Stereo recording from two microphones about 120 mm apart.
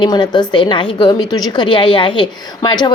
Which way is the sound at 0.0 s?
40° left (ahead or behind).